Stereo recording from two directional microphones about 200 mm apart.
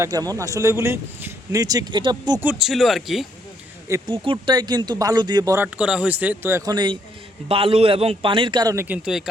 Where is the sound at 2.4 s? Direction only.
Centre (ahead or behind).